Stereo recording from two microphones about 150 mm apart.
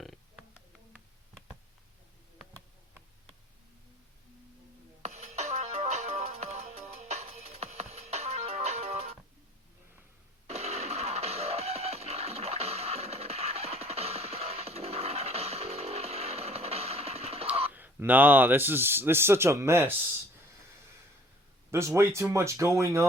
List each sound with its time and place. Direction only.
5.0 s music: 50° right (ahead or behind)
10.4 s music: 45° right (ahead or behind)
17.7 s speech: 10° right (ahead or behind)
21.7 s speech: 20° right (ahead or behind)